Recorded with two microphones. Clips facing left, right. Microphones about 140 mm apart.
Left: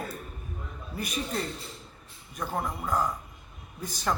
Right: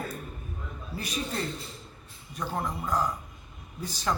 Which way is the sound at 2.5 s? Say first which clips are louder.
Even; 5° left (ahead or behind).